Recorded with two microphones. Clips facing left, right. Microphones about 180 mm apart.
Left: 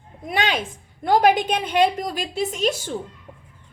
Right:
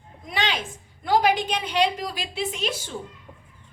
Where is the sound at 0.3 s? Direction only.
50° left (ahead or behind).